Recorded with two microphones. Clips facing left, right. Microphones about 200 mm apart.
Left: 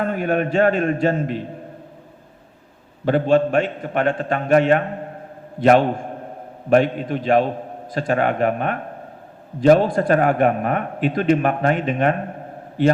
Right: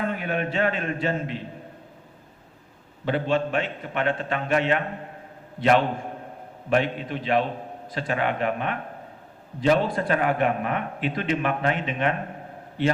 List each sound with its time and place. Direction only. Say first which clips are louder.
0.0 s a man's voice: left 6 dB; 45° left (ahead or behind)
3.1 s a man's voice: left 7 dB; 45° left (ahead or behind)